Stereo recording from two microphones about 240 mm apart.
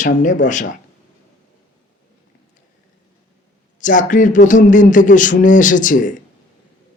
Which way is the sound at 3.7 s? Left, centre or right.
Left.